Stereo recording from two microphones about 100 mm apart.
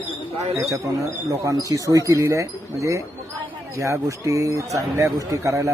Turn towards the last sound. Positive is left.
turn(degrees=-35)  # may be behind; listen again after turning